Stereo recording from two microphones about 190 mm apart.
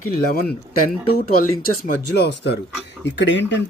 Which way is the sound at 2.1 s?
60° left (ahead or behind).